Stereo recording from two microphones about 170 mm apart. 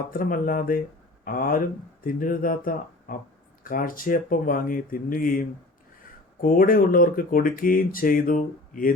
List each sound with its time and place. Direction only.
0.1 s speech: 55° left (ahead or behind)